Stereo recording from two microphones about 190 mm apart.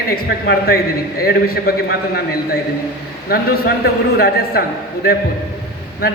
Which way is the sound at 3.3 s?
55° left (ahead or behind).